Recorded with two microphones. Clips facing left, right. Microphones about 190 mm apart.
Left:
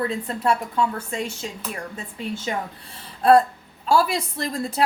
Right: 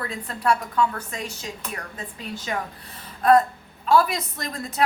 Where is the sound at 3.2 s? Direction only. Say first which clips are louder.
Left 2 dB; 30° left (ahead or behind).